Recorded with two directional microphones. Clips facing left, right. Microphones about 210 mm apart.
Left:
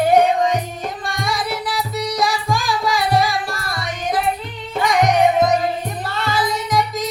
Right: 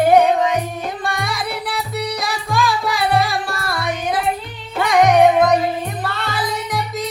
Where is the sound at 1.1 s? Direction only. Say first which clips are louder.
Left 3 dB; 60° right (ahead or behind).